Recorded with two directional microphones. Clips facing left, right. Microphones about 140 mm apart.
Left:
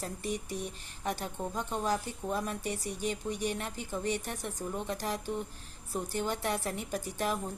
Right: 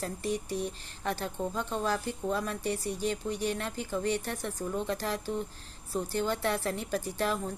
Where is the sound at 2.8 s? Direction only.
40° right (ahead or behind).